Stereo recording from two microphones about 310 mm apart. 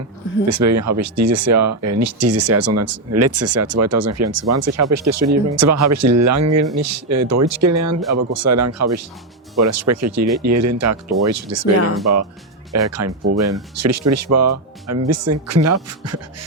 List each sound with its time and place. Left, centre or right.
0.4 s speech: right